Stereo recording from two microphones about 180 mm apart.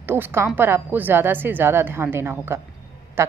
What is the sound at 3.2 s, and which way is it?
Quack, 15° right (ahead or behind).